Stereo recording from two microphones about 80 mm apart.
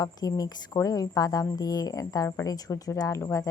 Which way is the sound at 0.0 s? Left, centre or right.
Left.